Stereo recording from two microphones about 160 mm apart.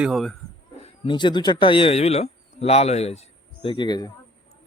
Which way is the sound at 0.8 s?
35° left (ahead or behind).